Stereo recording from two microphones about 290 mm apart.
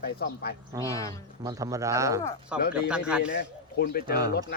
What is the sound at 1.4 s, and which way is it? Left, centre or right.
A man's voice, centre.